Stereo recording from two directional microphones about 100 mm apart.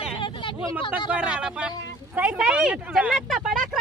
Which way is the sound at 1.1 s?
10° right (ahead or behind).